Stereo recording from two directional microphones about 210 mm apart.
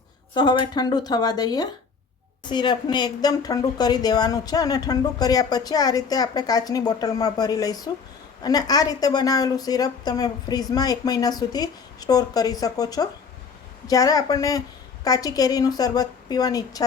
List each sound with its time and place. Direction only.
0.3 s speech: 20° left (ahead or behind)